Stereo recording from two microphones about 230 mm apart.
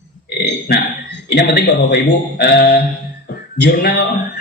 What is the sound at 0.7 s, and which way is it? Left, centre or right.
Speech, left.